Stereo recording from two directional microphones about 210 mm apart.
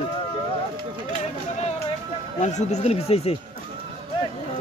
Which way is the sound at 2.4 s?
35° left (ahead or behind).